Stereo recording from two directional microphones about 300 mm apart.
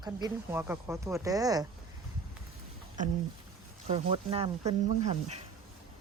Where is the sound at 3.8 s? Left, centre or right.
Centre.